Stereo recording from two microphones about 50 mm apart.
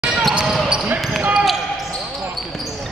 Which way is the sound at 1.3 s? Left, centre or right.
Centre.